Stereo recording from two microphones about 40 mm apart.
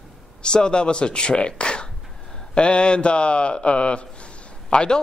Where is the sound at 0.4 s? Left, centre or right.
Left.